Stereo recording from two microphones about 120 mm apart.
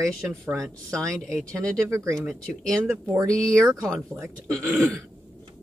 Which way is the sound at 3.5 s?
25° right (ahead or behind).